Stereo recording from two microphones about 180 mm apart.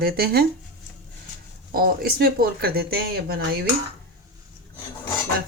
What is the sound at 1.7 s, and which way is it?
Speech, 55° right (ahead or behind).